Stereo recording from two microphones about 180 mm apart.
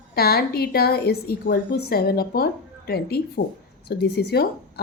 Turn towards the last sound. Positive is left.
turn(degrees=65)  # may be behind; listen again after turning